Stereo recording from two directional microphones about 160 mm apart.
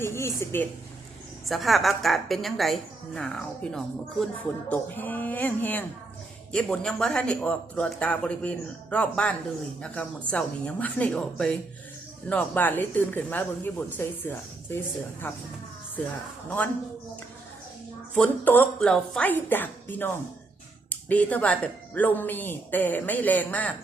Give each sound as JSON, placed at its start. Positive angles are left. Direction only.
{"t": 0.0, "sound": "speech", "side_deg": 15}
{"t": 1.5, "sound": "a woman's voice", "side_deg": 0}
{"t": 18.1, "sound": "speech", "side_deg": 10}